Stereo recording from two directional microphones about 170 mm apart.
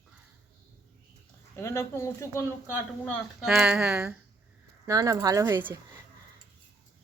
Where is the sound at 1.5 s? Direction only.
15° left (ahead or behind).